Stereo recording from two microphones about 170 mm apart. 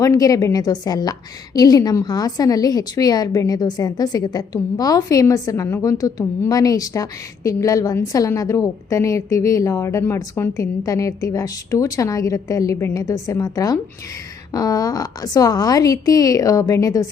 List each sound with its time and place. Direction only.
0.0 s a woman's voice: 20° left (ahead or behind)